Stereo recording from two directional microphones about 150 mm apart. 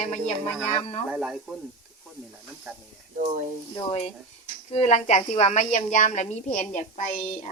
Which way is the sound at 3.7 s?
40° left (ahead or behind).